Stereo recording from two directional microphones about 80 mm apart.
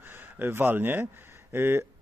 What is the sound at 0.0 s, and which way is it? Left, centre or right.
A man's voice, right.